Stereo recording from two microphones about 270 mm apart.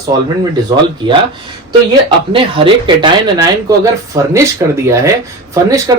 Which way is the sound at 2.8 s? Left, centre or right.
Centre.